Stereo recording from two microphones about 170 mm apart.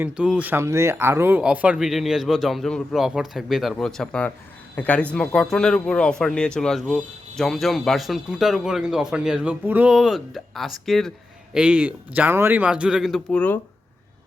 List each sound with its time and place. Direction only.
0.0 s speech: 5° right (ahead or behind)